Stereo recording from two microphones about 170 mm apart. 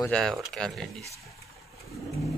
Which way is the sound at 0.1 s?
Centre (ahead or behind).